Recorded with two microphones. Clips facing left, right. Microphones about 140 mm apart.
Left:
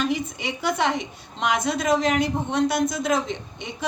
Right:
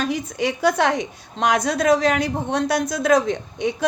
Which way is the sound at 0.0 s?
40° right (ahead or behind).